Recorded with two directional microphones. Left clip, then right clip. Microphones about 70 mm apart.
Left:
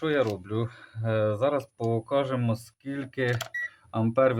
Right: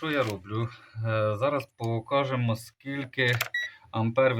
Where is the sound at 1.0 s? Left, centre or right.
Left.